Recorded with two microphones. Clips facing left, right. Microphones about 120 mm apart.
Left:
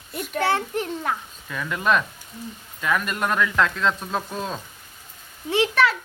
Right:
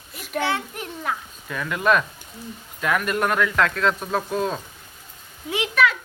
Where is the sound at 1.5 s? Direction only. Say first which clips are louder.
Right 2 dB; centre (ahead or behind).